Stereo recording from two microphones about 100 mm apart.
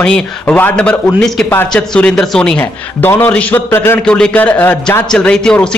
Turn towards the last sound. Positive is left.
turn(degrees=5)  # may be behind; listen again after turning